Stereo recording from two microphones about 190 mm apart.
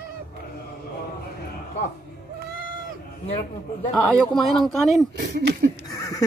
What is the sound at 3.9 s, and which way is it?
Speech, 5° left (ahead or behind).